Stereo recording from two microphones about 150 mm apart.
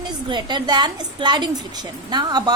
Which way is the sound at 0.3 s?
30° right (ahead or behind).